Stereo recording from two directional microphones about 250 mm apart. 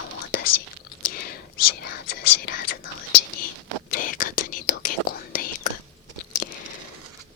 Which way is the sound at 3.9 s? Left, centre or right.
Left.